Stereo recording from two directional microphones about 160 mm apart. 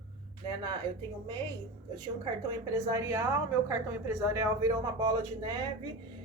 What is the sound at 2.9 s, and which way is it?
Speech, 20° right (ahead or behind).